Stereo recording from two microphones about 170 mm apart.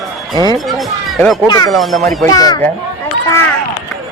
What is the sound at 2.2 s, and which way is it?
Speech, 20° left (ahead or behind).